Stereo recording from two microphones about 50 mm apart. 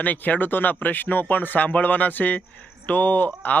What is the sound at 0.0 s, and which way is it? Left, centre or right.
Speech, left.